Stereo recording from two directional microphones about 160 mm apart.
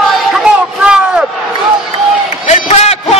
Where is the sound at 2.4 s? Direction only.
40° left (ahead or behind).